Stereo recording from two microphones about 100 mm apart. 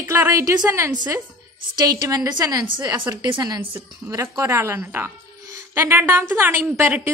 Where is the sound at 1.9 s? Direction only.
35° right (ahead or behind).